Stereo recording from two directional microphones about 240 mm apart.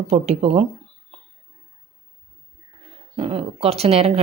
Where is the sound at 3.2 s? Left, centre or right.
Right.